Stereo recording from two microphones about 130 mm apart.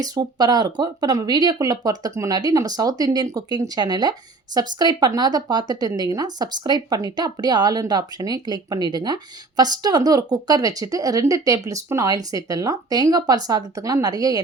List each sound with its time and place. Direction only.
0.0 s speech: 30° right (ahead or behind)